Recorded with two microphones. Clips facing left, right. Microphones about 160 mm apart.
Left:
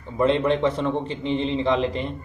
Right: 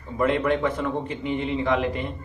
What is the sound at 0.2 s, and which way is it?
Speech, 25° left (ahead or behind).